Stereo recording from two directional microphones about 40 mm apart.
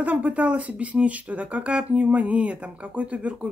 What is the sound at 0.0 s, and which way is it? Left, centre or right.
Speech, right.